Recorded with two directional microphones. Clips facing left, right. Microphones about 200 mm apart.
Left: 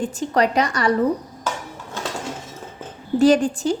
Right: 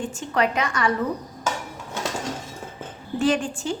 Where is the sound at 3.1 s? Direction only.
40° left (ahead or behind).